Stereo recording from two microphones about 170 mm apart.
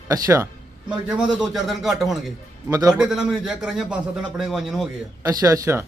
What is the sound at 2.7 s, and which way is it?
Speech, 20° right (ahead or behind).